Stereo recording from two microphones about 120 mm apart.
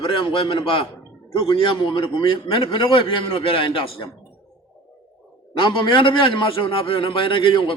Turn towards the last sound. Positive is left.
turn(degrees=45)  # may be behind; listen again after turning